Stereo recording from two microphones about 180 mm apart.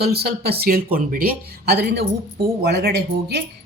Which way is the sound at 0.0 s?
60° right (ahead or behind).